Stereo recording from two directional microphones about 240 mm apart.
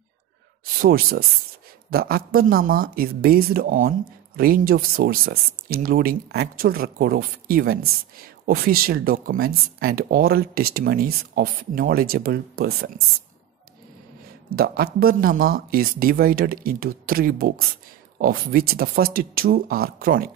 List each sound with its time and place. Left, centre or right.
0.8 s speech: right
14.5 s speech: right